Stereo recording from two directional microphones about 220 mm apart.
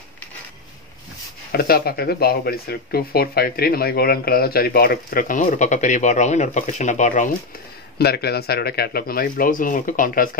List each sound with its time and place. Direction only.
1.5 s speech: 45° left (ahead or behind)
8.0 s speech: 45° left (ahead or behind)